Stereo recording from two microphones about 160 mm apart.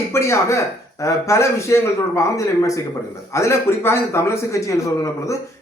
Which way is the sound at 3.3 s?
15° left (ahead or behind).